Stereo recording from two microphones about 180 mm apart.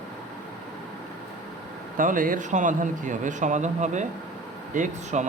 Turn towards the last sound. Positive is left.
turn(degrees=-45)  # may be behind; listen again after turning